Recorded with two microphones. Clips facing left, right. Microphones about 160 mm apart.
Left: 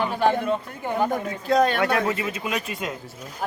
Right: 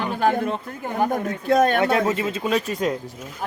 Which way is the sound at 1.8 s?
25° right (ahead or behind).